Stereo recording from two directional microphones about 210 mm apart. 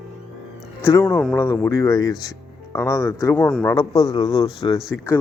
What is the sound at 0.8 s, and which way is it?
Speech, 10° left (ahead or behind).